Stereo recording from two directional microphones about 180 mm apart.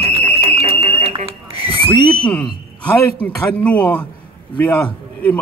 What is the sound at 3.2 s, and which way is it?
Speech, 5° left (ahead or behind).